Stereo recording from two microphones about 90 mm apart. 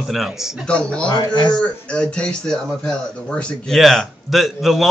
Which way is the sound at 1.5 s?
10° left (ahead or behind).